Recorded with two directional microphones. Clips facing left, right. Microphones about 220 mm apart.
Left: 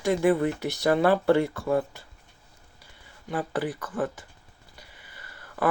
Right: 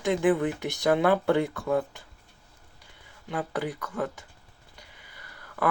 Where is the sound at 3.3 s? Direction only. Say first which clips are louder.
Left 2 dB; centre (ahead or behind).